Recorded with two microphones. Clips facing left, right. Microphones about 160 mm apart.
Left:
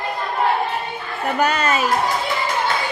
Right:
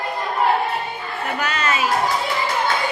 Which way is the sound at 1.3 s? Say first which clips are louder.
Left 5 dB; 45° left (ahead or behind).